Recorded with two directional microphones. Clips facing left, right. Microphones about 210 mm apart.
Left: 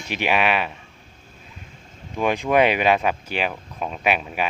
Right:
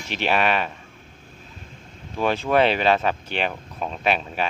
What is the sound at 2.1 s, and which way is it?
Speech, 15° left (ahead or behind).